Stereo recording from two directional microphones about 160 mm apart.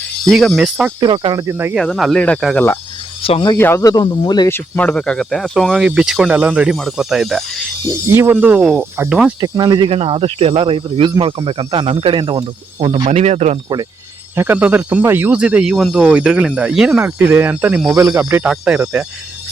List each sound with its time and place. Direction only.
0.3 s speech: centre (ahead or behind)
0.9 s speech: 30° right (ahead or behind)
1.7 s speech: centre (ahead or behind)
3.2 s speech: 30° left (ahead or behind)
3.6 s speech: 15° left (ahead or behind)
4.5 s speech: 10° left (ahead or behind)
8.0 s speech: 15° right (ahead or behind)
9.4 s speech: 25° right (ahead or behind); by 13.6 s 45° right (ahead or behind)
14.3 s speech: 15° right (ahead or behind)